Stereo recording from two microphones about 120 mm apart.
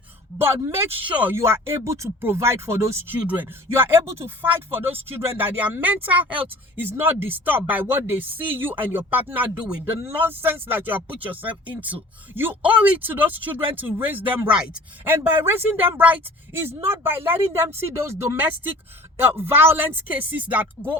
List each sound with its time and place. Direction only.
0.3 s speech: 20° right (ahead or behind)